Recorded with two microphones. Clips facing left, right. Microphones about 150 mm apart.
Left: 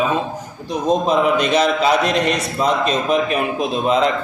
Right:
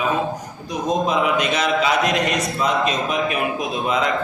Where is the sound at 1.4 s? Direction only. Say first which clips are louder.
Left 4 dB; 35° left (ahead or behind).